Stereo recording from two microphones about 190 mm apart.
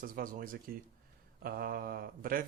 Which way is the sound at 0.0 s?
50° right (ahead or behind).